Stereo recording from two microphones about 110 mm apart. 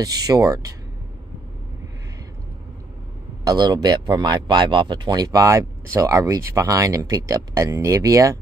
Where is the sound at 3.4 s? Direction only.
35° right (ahead or behind).